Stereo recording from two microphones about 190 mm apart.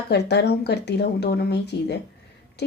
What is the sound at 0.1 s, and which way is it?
Speech, 60° left (ahead or behind).